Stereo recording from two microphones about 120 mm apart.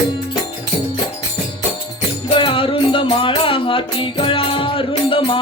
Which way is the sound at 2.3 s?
45° left (ahead or behind).